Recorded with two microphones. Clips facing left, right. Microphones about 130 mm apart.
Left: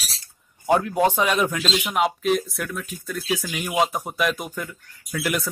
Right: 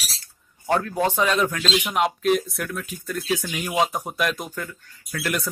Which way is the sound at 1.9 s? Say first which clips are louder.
Even; centre (ahead or behind).